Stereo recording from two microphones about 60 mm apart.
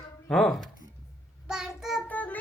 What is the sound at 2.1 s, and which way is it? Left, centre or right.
Music, left.